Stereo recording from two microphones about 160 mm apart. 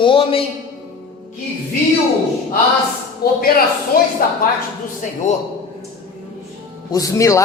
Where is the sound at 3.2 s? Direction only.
75° left (ahead or behind).